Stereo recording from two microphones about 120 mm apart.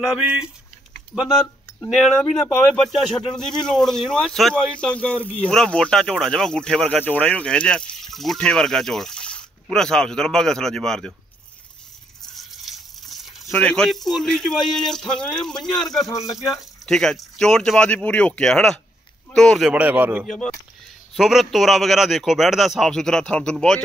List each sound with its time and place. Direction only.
0.0 s a man's voice: 5° right (ahead or behind)
2.0 s a man's voice: 5° left (ahead or behind)
12.3 s a sound: centre (ahead or behind)
13.6 s a man's voice: 10° left (ahead or behind)
16.1 s speech: 30° left (ahead or behind)
16.8 s a man's voice: 5° left (ahead or behind)
19.7 s a man's voice: 15° right (ahead or behind)
20.2 s a man's voice: 5° left (ahead or behind)